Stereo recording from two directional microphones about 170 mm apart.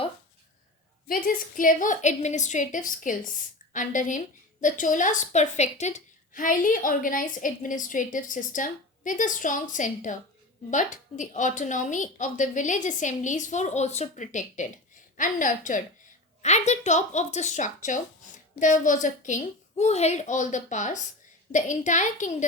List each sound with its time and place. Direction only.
1.0 s a woman's voice: 55° left (ahead or behind)